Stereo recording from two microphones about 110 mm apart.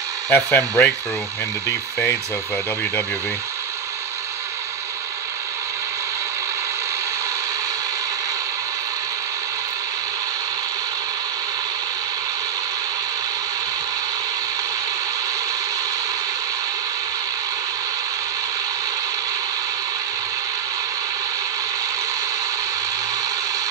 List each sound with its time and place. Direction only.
0.3 s speech: 20° left (ahead or behind)
2.0 s speech: 15° left (ahead or behind)